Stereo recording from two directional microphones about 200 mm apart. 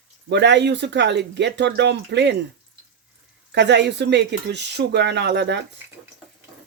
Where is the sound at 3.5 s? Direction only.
60° right (ahead or behind).